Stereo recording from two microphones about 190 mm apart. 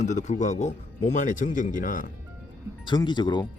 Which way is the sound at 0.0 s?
40° left (ahead or behind).